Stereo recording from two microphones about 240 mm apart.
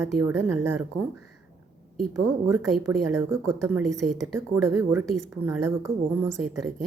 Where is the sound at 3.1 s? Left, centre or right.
Centre.